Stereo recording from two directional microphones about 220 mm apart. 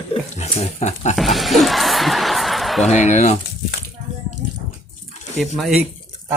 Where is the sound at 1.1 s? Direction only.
Centre (ahead or behind).